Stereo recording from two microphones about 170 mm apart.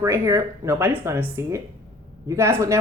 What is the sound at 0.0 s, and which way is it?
Speech, 20° right (ahead or behind).